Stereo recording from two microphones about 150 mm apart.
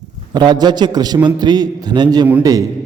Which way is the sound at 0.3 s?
30° right (ahead or behind).